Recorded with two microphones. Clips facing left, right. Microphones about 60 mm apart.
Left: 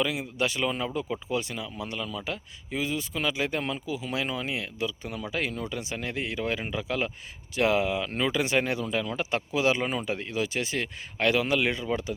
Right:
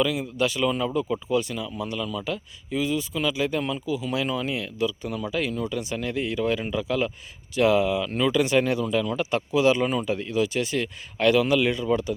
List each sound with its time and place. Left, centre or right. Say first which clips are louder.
0.0 s speech: right 4 dB; left